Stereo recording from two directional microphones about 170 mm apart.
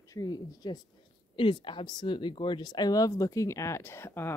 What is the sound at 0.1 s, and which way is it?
Speech, 20° left (ahead or behind).